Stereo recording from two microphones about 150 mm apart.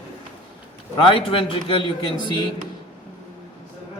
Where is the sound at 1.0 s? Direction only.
35° left (ahead or behind).